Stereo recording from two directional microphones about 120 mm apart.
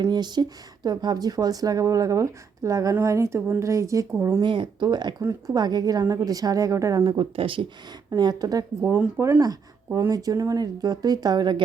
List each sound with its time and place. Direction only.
0.0 s a woman's voice: 35° right (ahead or behind)
4.4 s speech: 45° right (ahead or behind)
5.2 s a woman's voice: 25° right (ahead or behind)
7.0 s speech: 45° right (ahead or behind)
8.1 s speech: 35° right (ahead or behind)
9.0 s a woman's voice: 15° right (ahead or behind); by 11.6 s 40° right (ahead or behind)